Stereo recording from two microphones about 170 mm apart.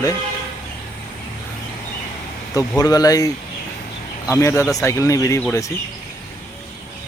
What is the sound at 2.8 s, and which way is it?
Speech, 20° left (ahead or behind).